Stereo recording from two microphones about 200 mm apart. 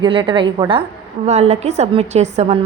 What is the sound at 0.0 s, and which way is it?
A woman's voice, 25° right (ahead or behind).